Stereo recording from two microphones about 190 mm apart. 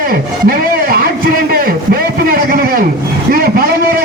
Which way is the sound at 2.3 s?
50° right (ahead or behind).